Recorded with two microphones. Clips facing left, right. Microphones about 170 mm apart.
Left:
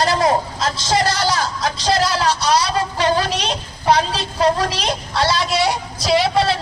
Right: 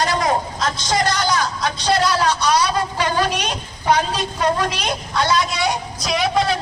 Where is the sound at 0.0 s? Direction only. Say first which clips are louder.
Left 3 dB; 35° left (ahead or behind).